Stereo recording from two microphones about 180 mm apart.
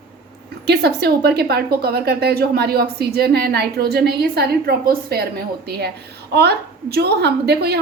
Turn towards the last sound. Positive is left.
turn(degrees=-65)  # may be behind; listen again after turning